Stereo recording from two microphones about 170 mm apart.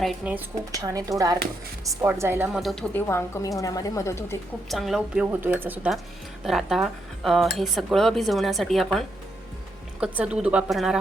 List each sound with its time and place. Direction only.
0.0 s a woman's voice: 10° right (ahead or behind)
0.8 s a woman's voice: 20° right (ahead or behind)
2.5 s speech: centre (ahead or behind)
2.9 s a woman's voice: 15° left (ahead or behind)
4.7 s a woman's voice: centre (ahead or behind)